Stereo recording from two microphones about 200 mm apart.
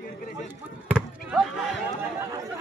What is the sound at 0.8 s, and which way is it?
Basketball bounce, 5° right (ahead or behind).